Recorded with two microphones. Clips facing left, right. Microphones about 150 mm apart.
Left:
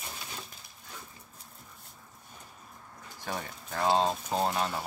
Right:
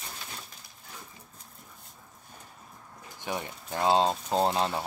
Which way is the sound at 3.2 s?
20° right (ahead or behind).